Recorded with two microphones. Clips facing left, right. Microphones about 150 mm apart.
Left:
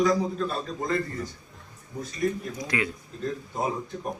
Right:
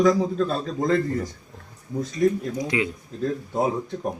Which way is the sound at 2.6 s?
20° right (ahead or behind).